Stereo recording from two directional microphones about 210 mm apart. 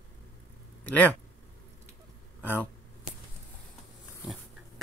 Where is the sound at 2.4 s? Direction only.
10° left (ahead or behind).